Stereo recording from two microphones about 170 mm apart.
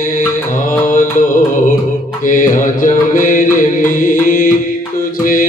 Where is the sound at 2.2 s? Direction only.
50° left (ahead or behind).